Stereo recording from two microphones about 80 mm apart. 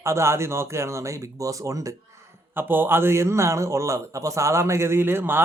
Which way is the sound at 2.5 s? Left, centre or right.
Right.